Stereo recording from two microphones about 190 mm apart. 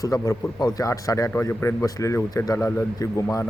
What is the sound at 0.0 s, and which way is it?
A man's voice, 20° left (ahead or behind).